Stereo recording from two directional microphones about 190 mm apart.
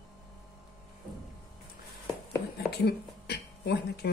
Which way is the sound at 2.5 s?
55° left (ahead or behind).